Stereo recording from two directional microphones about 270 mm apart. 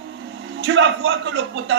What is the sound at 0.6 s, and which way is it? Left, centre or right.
A man's voice, right.